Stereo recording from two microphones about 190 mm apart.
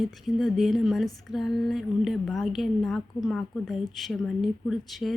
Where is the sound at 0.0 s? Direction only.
Centre (ahead or behind).